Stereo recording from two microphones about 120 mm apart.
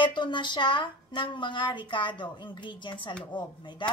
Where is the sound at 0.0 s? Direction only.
40° left (ahead or behind).